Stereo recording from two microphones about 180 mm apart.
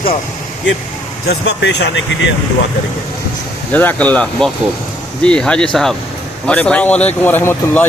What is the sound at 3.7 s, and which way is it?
Speech, 10° left (ahead or behind).